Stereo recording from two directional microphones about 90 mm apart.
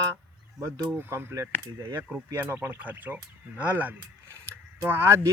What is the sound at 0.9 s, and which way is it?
Speech, 25° right (ahead or behind).